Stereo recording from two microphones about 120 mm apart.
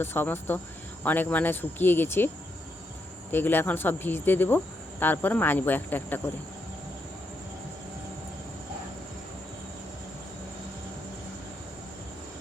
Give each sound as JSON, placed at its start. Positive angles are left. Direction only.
{"t": 0.0, "sound": "speech", "side_deg": 20}
{"t": 3.3, "sound": "speech", "side_deg": 15}